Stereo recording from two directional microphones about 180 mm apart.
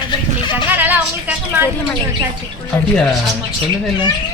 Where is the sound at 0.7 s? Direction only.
10° right (ahead or behind).